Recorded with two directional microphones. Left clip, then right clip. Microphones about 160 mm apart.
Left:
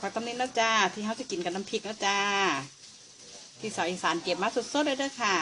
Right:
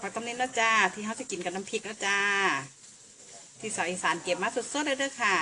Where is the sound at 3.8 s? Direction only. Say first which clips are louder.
Even; 20° left (ahead or behind).